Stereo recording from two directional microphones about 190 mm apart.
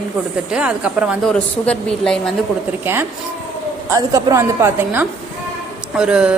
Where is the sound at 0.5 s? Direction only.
5° right (ahead or behind).